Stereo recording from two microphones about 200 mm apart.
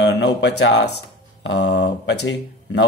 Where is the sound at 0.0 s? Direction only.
60° left (ahead or behind).